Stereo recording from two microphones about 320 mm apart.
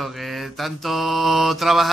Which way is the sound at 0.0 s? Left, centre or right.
Centre.